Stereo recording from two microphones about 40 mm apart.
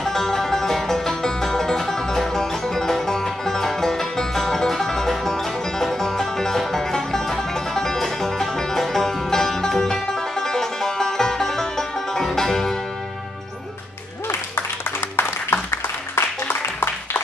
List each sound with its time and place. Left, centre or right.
0.0 s music: centre
14.2 s applause: left
16.4 s a sound: left